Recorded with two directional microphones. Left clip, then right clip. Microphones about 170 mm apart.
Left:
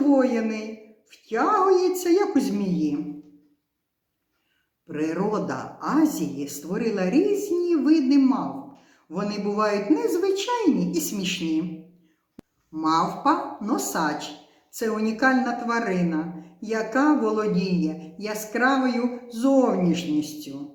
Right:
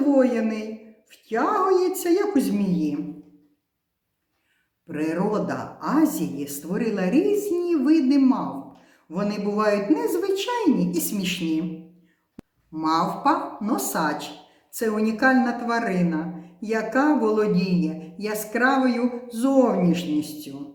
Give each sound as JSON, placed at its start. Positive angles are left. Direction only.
{"t": 0.1, "sound": "a woman's voice", "side_deg": -20}
{"t": 4.9, "sound": "a woman's voice", "side_deg": -20}
{"t": 12.4, "sound": "a sound", "side_deg": 0}
{"t": 12.7, "sound": "a woman's voice", "side_deg": -20}